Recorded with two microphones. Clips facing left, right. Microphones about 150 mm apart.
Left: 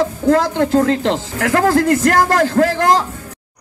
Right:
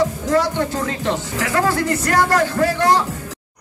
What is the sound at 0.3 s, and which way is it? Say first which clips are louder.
A man's voice: left 8 dB; 80° left.